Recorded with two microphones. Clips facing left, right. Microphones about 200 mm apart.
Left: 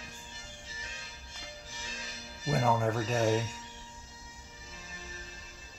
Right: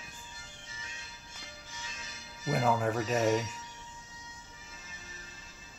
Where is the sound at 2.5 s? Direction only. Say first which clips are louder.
Even; centre (ahead or behind).